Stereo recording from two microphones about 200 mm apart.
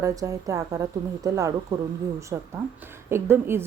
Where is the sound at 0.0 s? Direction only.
15° right (ahead or behind).